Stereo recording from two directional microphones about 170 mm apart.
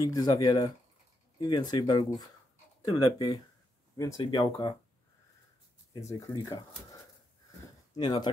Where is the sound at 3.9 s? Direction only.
20° left (ahead or behind).